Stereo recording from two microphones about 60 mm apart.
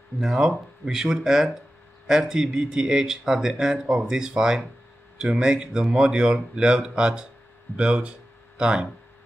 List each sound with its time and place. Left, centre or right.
0.2 s speech: centre